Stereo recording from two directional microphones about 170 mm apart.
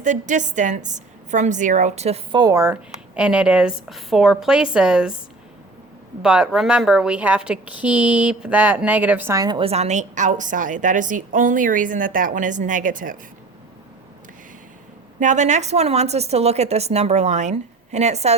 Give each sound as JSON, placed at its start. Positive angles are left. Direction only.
{"t": 0.0, "sound": "a woman's voice", "side_deg": -45}
{"t": 2.4, "sound": "speech", "side_deg": -15}
{"t": 3.2, "sound": "a woman's voice", "side_deg": -5}
{"t": 6.2, "sound": "speech", "side_deg": -5}
{"t": 15.2, "sound": "speech", "side_deg": -45}